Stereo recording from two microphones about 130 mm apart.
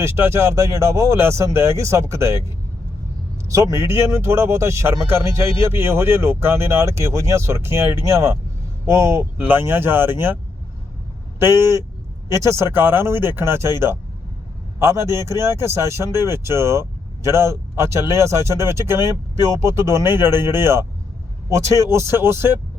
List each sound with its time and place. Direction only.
0.0 s speech: 20° right (ahead or behind)
3.4 s speech: 25° right (ahead or behind)
11.3 s speech: 20° right (ahead or behind)
21.8 s speech: 20° right (ahead or behind)